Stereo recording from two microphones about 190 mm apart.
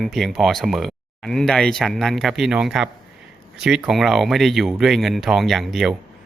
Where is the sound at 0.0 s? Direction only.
Centre (ahead or behind).